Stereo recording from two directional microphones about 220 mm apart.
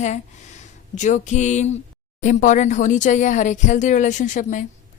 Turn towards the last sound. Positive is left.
turn(degrees=35)  # may be behind; listen again after turning